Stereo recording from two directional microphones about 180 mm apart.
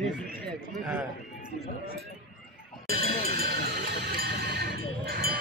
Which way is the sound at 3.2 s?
55° right (ahead or behind).